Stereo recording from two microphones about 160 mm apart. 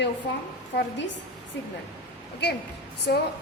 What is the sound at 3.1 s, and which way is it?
Speech, 90° left.